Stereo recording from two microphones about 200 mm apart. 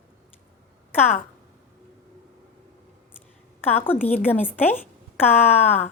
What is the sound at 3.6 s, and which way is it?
A woman's voice, 10° left (ahead or behind).